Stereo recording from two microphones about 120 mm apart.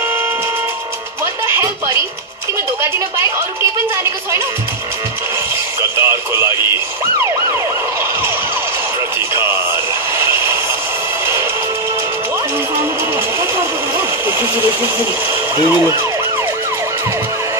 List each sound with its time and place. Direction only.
1.5 s music: 25° right (ahead or behind)
5.8 s speech: 20° right (ahead or behind)
9.3 s a sound: 20° right (ahead or behind)
13.9 s speech: 20° right (ahead or behind)